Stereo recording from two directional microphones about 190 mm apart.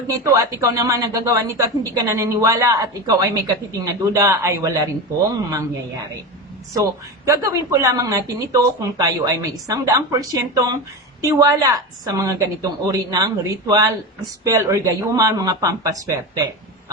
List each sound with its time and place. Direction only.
0.1 s a woman's voice: 20° right (ahead or behind)
6.7 s a woman's voice: 20° right (ahead or behind)